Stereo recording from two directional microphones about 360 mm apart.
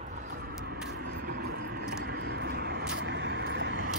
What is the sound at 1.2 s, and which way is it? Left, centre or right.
Vehicle, right.